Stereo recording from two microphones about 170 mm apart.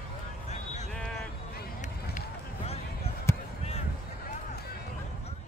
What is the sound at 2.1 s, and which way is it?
Run, 40° left (ahead or behind).